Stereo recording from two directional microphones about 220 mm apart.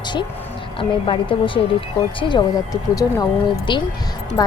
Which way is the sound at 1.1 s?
25° left (ahead or behind).